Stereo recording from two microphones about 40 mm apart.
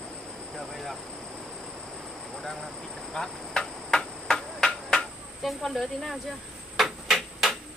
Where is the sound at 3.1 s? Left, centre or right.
Centre.